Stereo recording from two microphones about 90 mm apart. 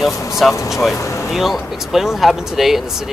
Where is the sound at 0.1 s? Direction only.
35° left (ahead or behind).